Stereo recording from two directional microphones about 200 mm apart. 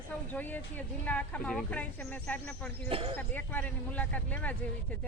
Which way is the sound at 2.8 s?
25° right (ahead or behind).